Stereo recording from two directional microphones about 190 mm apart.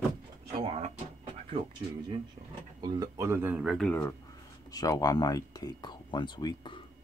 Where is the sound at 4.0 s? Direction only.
20° left (ahead or behind).